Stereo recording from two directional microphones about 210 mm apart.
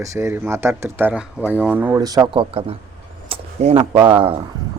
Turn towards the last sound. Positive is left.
turn(degrees=-25)  # may be behind; listen again after turning